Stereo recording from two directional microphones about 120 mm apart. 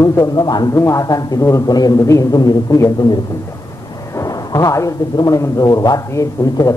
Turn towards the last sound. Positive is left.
turn(degrees=25)  # may be behind; listen again after turning